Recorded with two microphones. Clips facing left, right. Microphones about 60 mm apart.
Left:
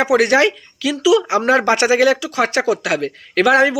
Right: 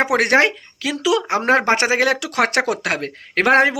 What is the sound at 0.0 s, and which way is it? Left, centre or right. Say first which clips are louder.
Speech: left 2 dB; right.